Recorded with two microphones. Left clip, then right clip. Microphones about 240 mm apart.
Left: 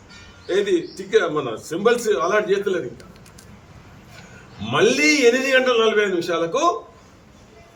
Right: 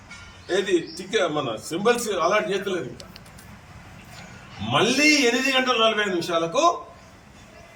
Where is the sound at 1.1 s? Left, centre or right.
Centre.